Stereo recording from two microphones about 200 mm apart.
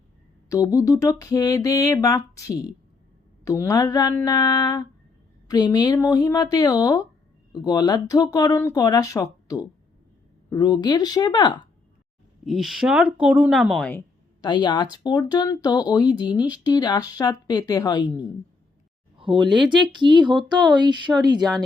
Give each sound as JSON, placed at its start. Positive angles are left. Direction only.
{"t": 0.4, "sound": "a sound", "side_deg": 15}
{"t": 5.5, "sound": "speech", "side_deg": 20}
{"t": 12.5, "sound": "a woman's voice", "side_deg": 0}
{"t": 14.4, "sound": "speech", "side_deg": 20}
{"t": 19.1, "sound": "a sound", "side_deg": -25}
{"t": 19.5, "sound": "speech", "side_deg": -25}